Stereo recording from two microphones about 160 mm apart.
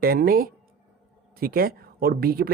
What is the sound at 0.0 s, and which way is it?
Speech, 65° right (ahead or behind).